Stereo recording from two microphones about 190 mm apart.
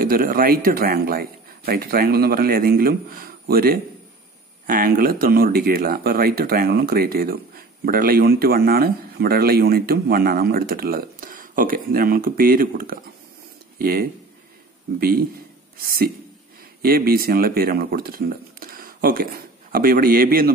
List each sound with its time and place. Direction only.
0.0 s speech: 50° right (ahead or behind)